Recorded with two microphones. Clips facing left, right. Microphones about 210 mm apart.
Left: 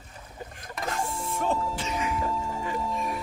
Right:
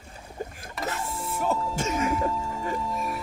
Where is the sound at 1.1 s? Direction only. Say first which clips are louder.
Right 2 dB; 5° right (ahead or behind).